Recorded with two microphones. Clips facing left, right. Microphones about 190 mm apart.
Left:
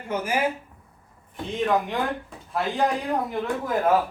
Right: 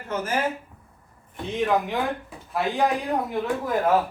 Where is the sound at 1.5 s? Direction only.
5° right (ahead or behind).